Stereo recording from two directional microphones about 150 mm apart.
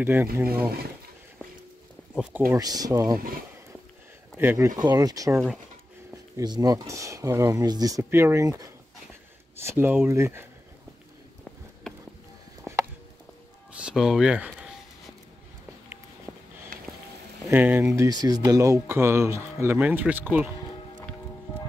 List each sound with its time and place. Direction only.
0.0 s speech: 15° right (ahead or behind)
2.5 s speech: 25° right (ahead or behind)
4.4 s speech: 15° right (ahead or behind)
13.7 s speech: 5° right (ahead or behind)
17.5 s speech: 15° right (ahead or behind)